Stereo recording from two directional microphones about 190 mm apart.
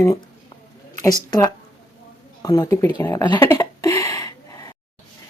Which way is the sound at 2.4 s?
20° left (ahead or behind).